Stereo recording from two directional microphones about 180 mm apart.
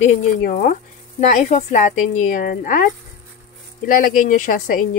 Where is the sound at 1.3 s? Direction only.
40° left (ahead or behind).